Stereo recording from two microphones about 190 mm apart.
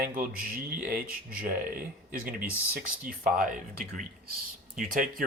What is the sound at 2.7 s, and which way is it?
Speech, 50° right (ahead or behind).